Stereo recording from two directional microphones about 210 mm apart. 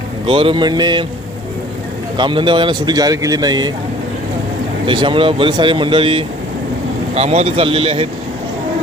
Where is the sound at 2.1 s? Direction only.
20° right (ahead or behind).